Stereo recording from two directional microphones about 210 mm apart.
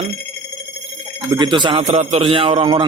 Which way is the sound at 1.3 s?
20° right (ahead or behind).